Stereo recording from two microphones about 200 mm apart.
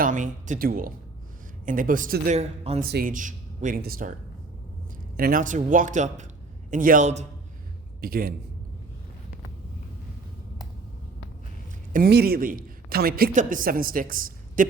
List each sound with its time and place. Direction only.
0.0 s a woman's voice: 40° right (ahead or behind)
2.9 s a woman's voice: 45° right (ahead or behind)
5.1 s speech: 45° right (ahead or behind)
8.0 s a woman's voice: 45° right (ahead or behind)
11.9 s a woman's voice: 50° right (ahead or behind)